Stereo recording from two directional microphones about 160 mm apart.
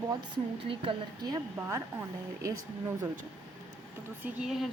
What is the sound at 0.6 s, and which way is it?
Speech, 35° right (ahead or behind).